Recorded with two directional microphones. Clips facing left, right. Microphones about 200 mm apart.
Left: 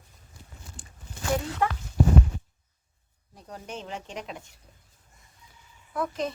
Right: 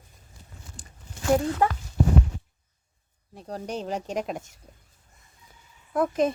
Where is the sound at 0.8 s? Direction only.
40° right (ahead or behind).